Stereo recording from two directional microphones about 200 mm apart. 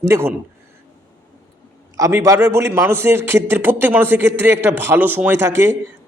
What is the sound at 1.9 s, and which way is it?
A man's voice, 15° right (ahead or behind).